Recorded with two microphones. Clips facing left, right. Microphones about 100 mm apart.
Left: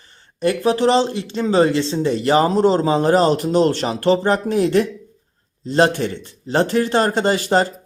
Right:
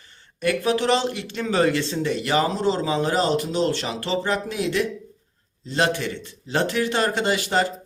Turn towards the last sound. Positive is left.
turn(degrees=40)  # may be behind; listen again after turning